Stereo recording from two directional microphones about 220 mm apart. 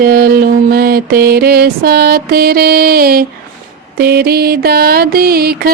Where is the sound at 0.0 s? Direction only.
40° right (ahead or behind).